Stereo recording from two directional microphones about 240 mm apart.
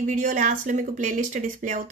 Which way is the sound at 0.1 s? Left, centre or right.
Right.